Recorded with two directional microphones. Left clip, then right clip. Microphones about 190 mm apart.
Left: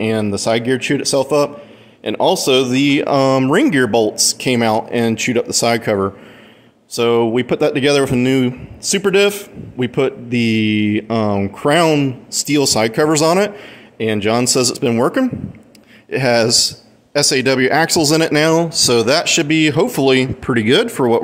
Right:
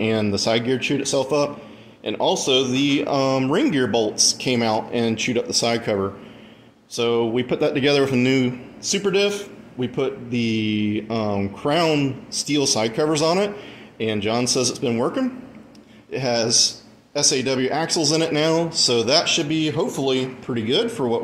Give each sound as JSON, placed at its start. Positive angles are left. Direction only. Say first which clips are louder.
{"t": 0.0, "sound": "speech", "louder": "left 3 dB", "side_deg": 25}